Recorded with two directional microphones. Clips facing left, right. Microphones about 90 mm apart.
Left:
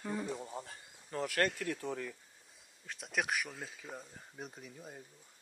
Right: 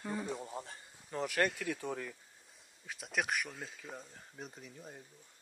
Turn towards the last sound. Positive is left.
turn(degrees=5)  # may be behind; listen again after turning